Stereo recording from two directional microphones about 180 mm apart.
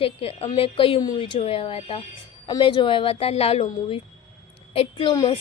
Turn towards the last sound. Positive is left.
turn(degrees=30)  # may be behind; listen again after turning